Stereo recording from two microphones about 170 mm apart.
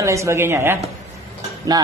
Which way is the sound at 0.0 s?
15° right (ahead or behind).